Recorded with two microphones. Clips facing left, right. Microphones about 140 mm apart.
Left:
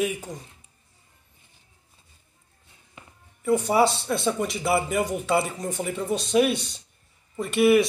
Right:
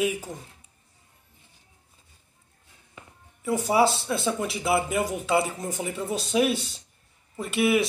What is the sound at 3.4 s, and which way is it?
Speech, centre (ahead or behind).